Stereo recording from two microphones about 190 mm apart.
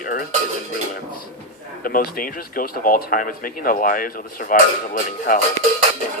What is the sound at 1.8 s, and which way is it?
Speech, 50° left (ahead or behind).